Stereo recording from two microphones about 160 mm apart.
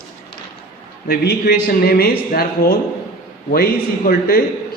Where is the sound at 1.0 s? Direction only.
75° left (ahead or behind).